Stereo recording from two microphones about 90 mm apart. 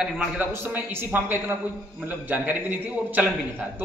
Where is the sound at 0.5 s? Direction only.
25° right (ahead or behind).